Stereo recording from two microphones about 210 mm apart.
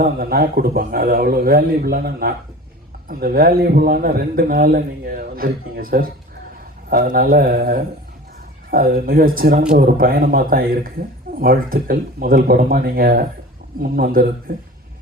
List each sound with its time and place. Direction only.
0.0 s a man's voice: 45° right (ahead or behind)